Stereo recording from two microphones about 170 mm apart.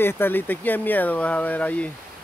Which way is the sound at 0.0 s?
10° left (ahead or behind).